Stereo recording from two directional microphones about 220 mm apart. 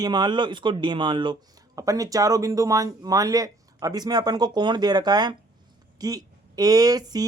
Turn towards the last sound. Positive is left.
turn(degrees=-15)  # may be behind; listen again after turning